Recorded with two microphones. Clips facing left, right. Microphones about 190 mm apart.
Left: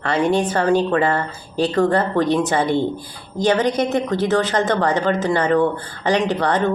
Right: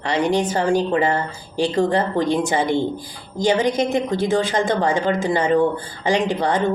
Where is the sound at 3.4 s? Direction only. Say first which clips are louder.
Left 1 dB; 10° right (ahead or behind).